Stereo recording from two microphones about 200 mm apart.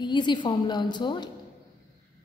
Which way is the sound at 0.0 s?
20° left (ahead or behind).